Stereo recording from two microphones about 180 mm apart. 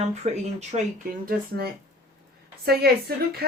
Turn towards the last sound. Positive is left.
turn(degrees=-60)  # may be behind; listen again after turning